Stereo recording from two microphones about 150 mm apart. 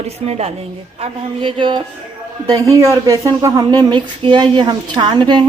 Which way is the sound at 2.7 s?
20° right (ahead or behind).